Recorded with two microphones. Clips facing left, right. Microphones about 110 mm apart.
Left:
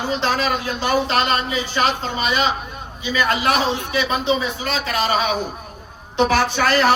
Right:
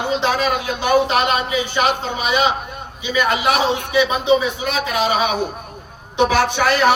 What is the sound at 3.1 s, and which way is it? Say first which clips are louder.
A man's voice: right 1 dB; 10° right (ahead or behind).